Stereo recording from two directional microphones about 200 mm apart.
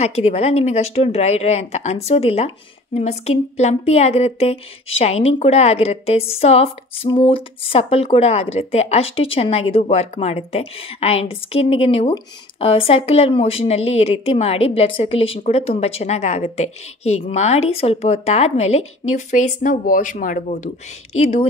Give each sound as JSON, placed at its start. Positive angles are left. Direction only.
{"t": 0.0, "sound": "speech", "side_deg": 30}